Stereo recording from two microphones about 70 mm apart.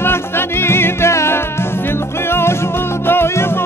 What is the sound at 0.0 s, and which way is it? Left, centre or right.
Music, left.